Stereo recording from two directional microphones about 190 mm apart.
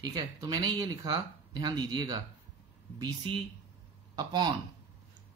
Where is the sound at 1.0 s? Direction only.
20° right (ahead or behind).